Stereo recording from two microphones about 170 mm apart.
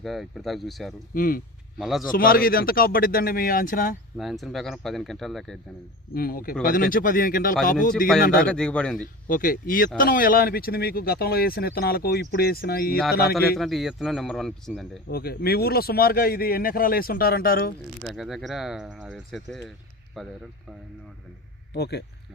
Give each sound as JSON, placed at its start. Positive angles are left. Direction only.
{"t": 0.0, "sound": "speech", "side_deg": 0}
{"t": 1.1, "sound": "speech", "side_deg": 55}
{"t": 1.8, "sound": "speech", "side_deg": 0}
{"t": 2.1, "sound": "speech", "side_deg": 60}
{"t": 4.2, "sound": "speech", "side_deg": 0}
{"t": 6.1, "sound": "speech", "side_deg": 60}
{"t": 8.4, "sound": "speech", "side_deg": 5}
{"t": 9.2, "sound": "speech", "side_deg": 55}
{"t": 13.6, "sound": "speech", "side_deg": 0}
{"t": 15.1, "sound": "speech", "side_deg": 65}
{"t": 18.1, "sound": "speech", "side_deg": 0}
{"t": 21.7, "sound": "speech", "side_deg": 75}